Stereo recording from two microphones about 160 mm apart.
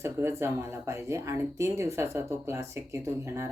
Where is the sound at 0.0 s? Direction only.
15° right (ahead or behind).